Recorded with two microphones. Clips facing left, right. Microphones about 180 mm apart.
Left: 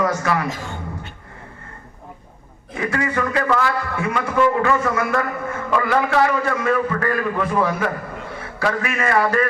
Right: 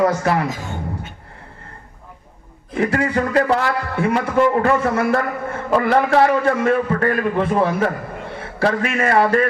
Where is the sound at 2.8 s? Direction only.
35° right (ahead or behind).